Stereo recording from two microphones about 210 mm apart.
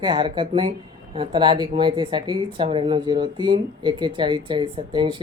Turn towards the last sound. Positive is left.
turn(degrees=-25)  # may be behind; listen again after turning